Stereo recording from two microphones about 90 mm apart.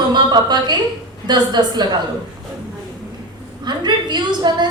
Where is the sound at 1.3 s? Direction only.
55° right (ahead or behind).